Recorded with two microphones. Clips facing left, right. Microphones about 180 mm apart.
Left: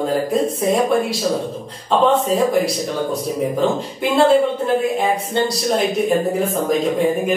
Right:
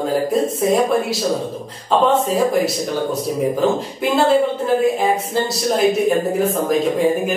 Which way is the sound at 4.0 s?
Centre (ahead or behind).